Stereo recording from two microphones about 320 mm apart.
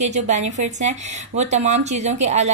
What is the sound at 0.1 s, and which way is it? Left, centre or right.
A woman's voice, right.